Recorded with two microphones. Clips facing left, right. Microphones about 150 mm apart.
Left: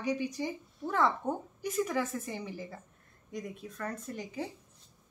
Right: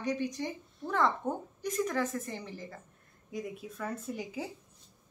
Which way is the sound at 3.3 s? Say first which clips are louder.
Right 2 dB; 5° right (ahead or behind).